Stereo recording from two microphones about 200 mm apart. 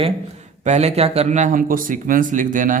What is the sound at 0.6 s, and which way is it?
Speech, 35° right (ahead or behind).